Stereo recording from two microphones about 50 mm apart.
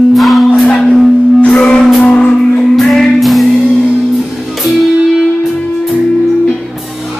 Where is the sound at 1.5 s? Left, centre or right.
Left.